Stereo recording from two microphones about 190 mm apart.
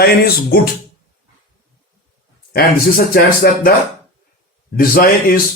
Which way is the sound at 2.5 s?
50° left (ahead or behind).